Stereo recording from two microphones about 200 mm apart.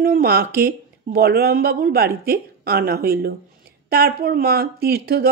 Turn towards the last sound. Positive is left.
turn(degrees=-50)  # may be behind; listen again after turning